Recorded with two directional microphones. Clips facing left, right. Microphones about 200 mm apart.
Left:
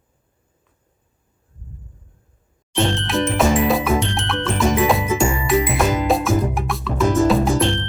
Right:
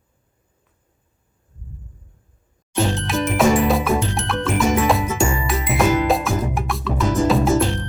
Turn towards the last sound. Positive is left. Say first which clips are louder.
# even
turn(degrees=-5)  # may be behind; listen again after turning